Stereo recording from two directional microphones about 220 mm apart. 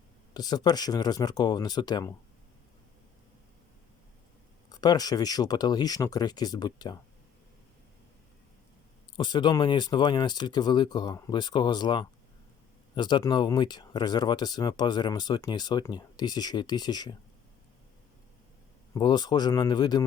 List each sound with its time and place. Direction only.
0.3 s speech: 20° left (ahead or behind)
4.7 s speech: 20° left (ahead or behind)
9.1 s speech: 20° left (ahead or behind)
18.9 s speech: 20° left (ahead or behind)